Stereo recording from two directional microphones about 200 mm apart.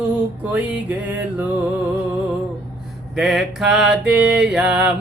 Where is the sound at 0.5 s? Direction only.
10° right (ahead or behind).